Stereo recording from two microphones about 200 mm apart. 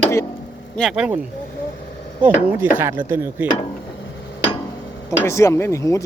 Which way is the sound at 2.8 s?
10° right (ahead or behind).